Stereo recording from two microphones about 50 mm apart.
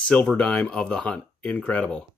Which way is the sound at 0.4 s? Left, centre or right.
Left.